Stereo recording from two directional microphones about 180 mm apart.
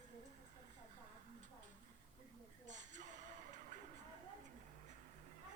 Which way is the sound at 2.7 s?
40° right (ahead or behind).